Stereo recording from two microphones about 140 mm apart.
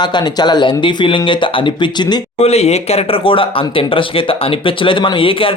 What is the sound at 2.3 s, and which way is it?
Speech, 50° left (ahead or behind).